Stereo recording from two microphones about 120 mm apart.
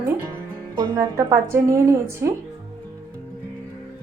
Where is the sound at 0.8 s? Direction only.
25° right (ahead or behind).